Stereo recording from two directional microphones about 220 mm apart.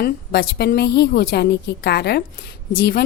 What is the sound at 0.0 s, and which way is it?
A woman's voice, 45° left (ahead or behind).